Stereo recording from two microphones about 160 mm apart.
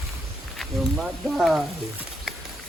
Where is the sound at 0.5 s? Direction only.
Centre (ahead or behind).